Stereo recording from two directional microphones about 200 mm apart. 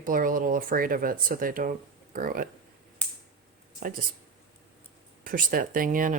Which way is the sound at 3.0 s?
5° left (ahead or behind).